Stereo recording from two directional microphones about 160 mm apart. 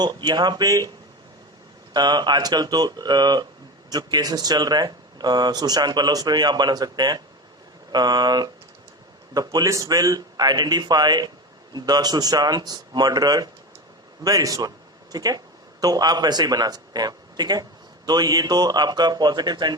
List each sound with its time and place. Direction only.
0.0 s a man's voice: 25° right (ahead or behind)
1.9 s a man's voice: 25° right (ahead or behind)